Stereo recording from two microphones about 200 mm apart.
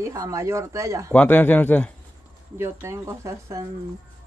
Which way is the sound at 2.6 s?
15° right (ahead or behind).